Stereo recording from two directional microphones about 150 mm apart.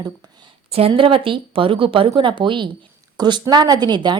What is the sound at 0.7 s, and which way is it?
A woman's voice, 40° right (ahead or behind).